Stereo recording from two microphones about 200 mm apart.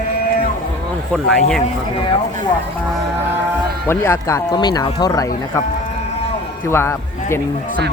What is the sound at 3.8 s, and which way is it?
Speech, 10° left (ahead or behind).